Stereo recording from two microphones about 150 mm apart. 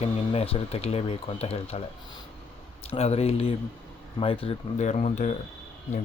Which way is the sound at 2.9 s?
45° left (ahead or behind).